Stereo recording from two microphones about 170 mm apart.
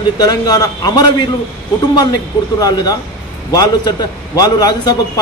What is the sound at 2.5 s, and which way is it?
A man's voice, 20° left (ahead or behind).